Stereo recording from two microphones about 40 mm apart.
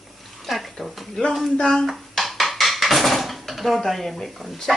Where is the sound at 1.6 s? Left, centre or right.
Centre.